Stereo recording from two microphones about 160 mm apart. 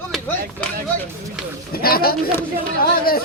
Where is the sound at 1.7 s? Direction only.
70° left (ahead or behind).